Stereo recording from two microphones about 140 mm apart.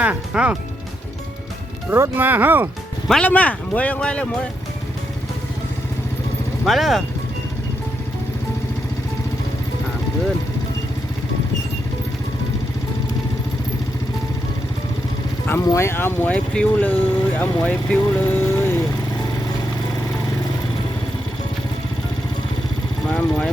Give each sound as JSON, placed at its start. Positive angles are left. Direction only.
{"t": 0.0, "sound": "speech", "side_deg": -10}
{"t": 1.9, "sound": "speech", "side_deg": -15}
{"t": 3.1, "sound": "speech", "side_deg": 10}
{"t": 6.7, "sound": "speech", "side_deg": 0}
{"t": 15.4, "sound": "speech", "side_deg": 20}
{"t": 23.0, "sound": "speech", "side_deg": 10}